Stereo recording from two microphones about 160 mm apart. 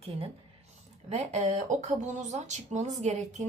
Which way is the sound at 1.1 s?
45° right (ahead or behind).